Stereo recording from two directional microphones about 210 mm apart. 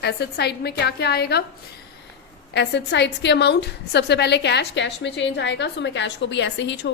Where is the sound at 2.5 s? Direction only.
55° left (ahead or behind).